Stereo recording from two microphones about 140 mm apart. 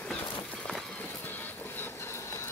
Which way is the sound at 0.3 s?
10° left (ahead or behind).